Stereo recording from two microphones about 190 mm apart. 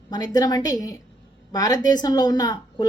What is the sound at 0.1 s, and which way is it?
A woman's voice, 20° left (ahead or behind).